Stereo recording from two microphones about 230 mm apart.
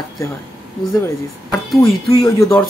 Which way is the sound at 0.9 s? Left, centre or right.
Centre.